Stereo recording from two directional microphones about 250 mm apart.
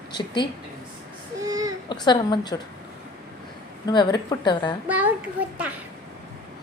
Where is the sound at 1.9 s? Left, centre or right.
Centre.